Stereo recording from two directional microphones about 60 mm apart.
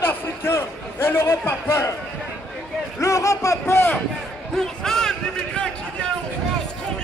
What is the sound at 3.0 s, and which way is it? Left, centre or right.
Speech, left.